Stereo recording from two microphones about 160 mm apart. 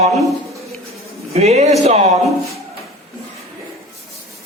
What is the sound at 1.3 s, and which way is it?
Speech, 45° right (ahead or behind).